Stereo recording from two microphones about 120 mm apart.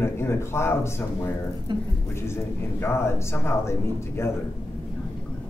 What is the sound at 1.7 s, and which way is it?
Speech, 40° right (ahead or behind).